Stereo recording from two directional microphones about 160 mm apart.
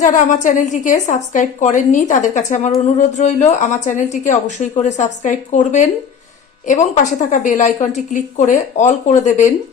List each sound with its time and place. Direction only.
0.0 s a woman's voice: 50° left (ahead or behind)
6.7 s a woman's voice: 50° left (ahead or behind)